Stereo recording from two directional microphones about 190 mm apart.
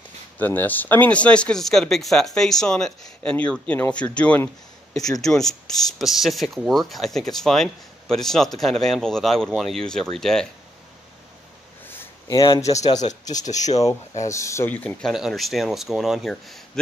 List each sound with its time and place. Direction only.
0.4 s speech: 10° left (ahead or behind)
12.3 s speech: 20° left (ahead or behind)
12.8 s speech: 35° left (ahead or behind)
14.2 s speech: 15° left (ahead or behind)